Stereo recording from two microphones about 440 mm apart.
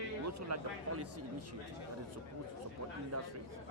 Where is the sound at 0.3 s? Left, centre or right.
Right.